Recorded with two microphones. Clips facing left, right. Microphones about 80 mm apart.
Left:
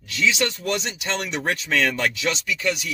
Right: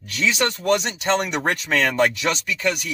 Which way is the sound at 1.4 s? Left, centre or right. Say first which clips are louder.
Right 1 dB; right.